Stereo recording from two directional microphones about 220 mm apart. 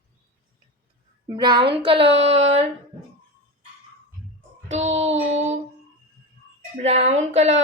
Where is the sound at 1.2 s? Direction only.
20° right (ahead or behind).